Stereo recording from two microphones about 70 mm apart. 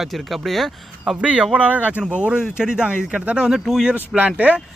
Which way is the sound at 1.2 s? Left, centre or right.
Centre.